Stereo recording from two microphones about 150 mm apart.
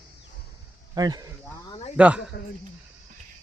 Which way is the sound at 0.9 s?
25° right (ahead or behind).